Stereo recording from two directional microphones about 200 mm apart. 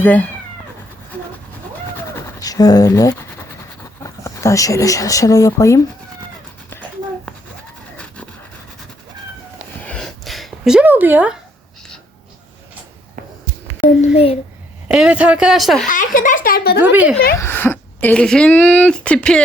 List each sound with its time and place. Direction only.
0.0 s speech: 5° left (ahead or behind)
2.4 s speech: 20° left (ahead or behind)
7.9 s dog: 5° left (ahead or behind)
9.8 s a sound: 5° left (ahead or behind)
14.0 s a sound: 30° left (ahead or behind)
14.8 s speech: 5° right (ahead or behind)
15.9 s speech: 40° left (ahead or behind)
16.8 s a woman's voice: 10° right (ahead or behind)
17.3 s speech: 10° left (ahead or behind)